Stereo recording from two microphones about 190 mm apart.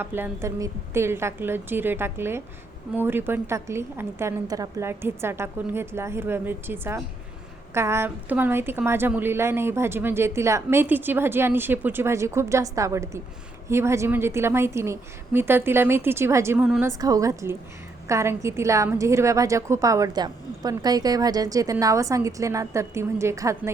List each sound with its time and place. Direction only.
0.0 s a woman's voice: 10° right (ahead or behind)